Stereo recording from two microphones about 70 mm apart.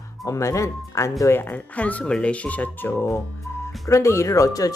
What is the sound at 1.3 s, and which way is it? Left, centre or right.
Speech, left.